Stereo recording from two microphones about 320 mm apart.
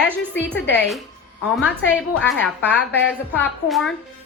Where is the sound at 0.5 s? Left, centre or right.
Centre.